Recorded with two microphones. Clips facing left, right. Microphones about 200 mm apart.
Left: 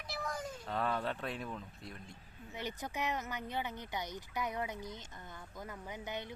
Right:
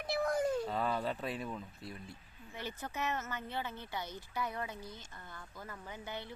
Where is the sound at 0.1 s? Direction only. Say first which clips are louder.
Right 9 dB; 55° right (ahead or behind).